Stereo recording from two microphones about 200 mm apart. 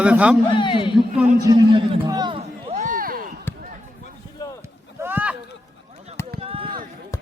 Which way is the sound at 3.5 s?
10° left (ahead or behind).